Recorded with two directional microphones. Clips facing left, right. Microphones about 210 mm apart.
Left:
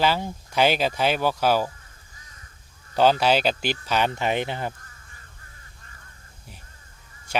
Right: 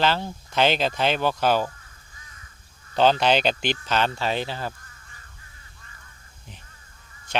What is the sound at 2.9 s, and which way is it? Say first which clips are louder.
Speech: even; 5° left (ahead or behind).